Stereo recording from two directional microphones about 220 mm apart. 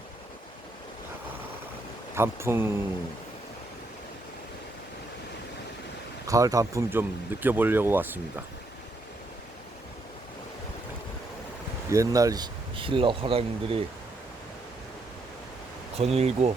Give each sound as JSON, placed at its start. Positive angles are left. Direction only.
{"t": 2.1, "sound": "speech", "side_deg": -10}
{"t": 6.2, "sound": "speech", "side_deg": -15}
{"t": 11.9, "sound": "speech", "side_deg": -15}
{"t": 16.0, "sound": "speech", "side_deg": -30}